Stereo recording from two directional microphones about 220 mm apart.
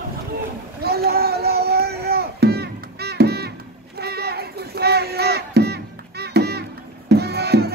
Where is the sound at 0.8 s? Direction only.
45° right (ahead or behind).